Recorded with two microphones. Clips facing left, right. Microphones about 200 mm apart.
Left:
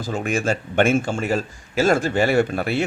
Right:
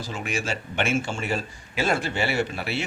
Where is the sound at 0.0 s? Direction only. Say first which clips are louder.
Left 7 dB; 50° left (ahead or behind).